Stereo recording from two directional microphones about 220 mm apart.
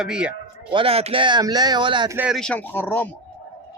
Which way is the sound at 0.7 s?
25° right (ahead or behind).